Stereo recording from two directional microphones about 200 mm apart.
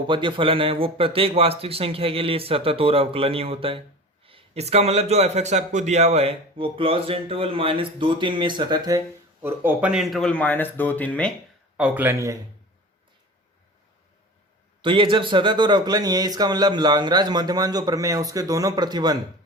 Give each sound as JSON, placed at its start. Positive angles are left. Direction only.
{"t": 0.1, "sound": "a man's voice", "side_deg": -25}
{"t": 11.8, "sound": "speech", "side_deg": -5}
{"t": 14.8, "sound": "a man's voice", "side_deg": -25}